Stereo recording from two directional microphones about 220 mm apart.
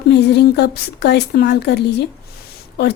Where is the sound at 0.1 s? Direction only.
50° left (ahead or behind).